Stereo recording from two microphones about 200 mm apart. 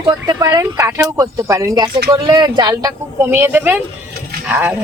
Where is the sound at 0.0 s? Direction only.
20° right (ahead or behind).